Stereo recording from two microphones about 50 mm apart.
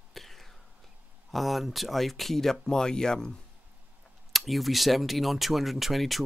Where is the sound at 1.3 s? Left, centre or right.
Centre.